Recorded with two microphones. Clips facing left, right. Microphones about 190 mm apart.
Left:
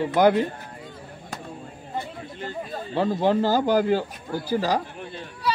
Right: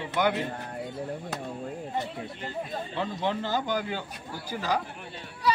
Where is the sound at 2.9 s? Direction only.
40° left (ahead or behind).